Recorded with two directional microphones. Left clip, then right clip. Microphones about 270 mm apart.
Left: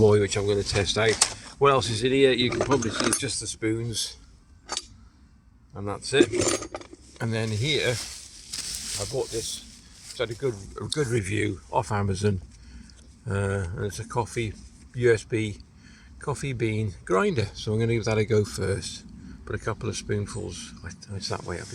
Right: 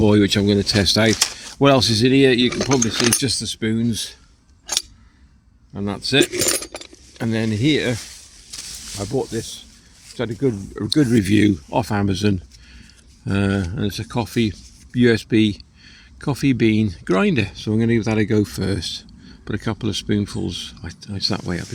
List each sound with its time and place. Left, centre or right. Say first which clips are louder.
0.0 s speech: right 4 dB; right
2.7 s speech: right 6 dB; centre
3.6 s speech: right 5 dB; right
5.7 s speech: right 4 dB; right
6.3 s keys jangling: right 4 dB; centre
7.2 s speech: right 7 dB; right
9.0 s speech: right 7 dB; right
17.3 s speech: right 6 dB; right